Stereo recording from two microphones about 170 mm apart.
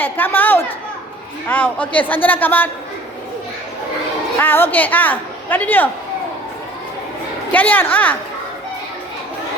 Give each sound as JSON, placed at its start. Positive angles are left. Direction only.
{"t": 0.0, "sound": "a woman's voice", "side_deg": 10}
{"t": 4.4, "sound": "a woman's voice", "side_deg": 10}
{"t": 7.5, "sound": "a woman's voice", "side_deg": 10}